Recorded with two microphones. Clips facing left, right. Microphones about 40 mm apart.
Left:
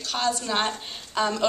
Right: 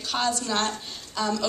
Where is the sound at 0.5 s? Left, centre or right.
Left.